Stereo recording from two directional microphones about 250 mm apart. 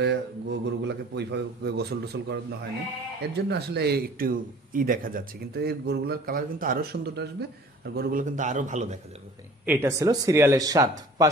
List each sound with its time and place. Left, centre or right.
0.0 s speech: right
9.7 s speech: centre